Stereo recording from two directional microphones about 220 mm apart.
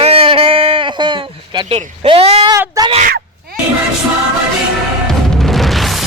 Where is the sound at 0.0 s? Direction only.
25° right (ahead or behind).